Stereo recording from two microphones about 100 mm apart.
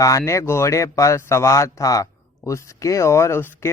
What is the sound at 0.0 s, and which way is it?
A man's voice, 35° left (ahead or behind).